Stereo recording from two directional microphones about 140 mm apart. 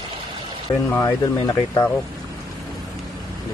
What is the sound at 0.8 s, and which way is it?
A man's voice, 20° left (ahead or behind).